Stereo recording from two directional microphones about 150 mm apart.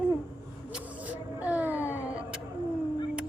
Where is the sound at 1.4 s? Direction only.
10° right (ahead or behind).